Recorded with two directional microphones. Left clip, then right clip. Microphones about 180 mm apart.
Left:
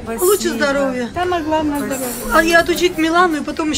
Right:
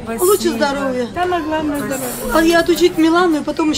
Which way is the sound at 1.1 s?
20° left (ahead or behind).